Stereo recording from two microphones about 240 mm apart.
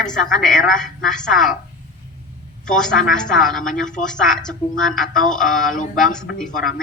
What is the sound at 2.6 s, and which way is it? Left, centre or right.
A woman's voice, centre.